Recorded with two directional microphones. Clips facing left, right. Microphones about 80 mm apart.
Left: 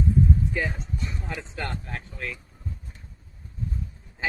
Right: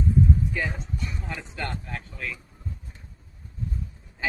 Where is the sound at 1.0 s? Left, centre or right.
Left.